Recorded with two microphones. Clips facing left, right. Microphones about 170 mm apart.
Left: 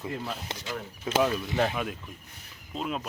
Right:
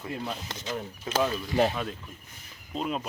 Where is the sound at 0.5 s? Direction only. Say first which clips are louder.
Right 2 dB; 20° right (ahead or behind).